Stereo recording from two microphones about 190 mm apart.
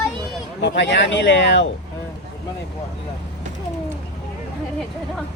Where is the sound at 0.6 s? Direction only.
65° left (ahead or behind).